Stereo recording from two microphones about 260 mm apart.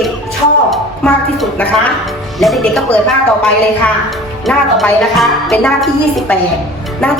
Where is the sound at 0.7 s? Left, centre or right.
Centre.